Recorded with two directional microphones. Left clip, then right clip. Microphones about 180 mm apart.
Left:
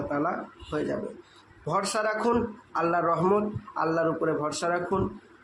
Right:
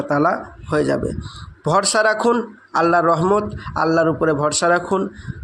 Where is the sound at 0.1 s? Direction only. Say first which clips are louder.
Right 14 dB; 45° right (ahead or behind).